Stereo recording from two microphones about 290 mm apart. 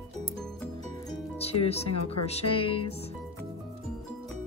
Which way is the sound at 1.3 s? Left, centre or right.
Left.